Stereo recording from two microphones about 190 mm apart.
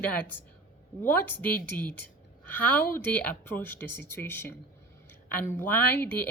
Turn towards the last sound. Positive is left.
turn(degrees=10)  # may be behind; listen again after turning